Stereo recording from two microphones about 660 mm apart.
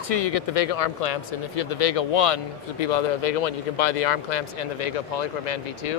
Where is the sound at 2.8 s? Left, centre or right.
Left.